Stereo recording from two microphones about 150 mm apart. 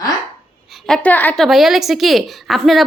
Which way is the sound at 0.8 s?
5° left (ahead or behind).